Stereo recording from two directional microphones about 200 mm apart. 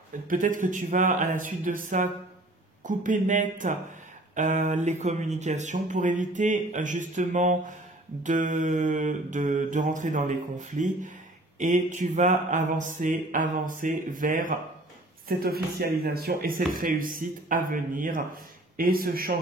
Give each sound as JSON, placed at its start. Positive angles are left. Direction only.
{"t": 0.3, "sound": "speech", "side_deg": -40}
{"t": 11.5, "sound": "speech", "side_deg": -40}